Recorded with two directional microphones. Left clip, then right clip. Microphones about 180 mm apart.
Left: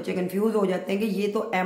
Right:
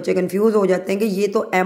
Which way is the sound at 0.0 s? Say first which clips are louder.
Right 9 dB; 40° right (ahead or behind).